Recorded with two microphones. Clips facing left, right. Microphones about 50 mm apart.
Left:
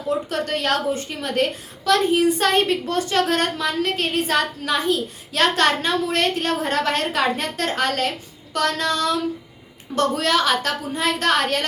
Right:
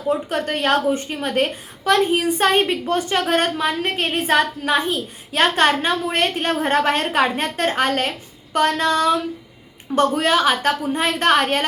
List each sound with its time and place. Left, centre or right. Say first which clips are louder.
0.1 s a woman's voice: right 2 dB; right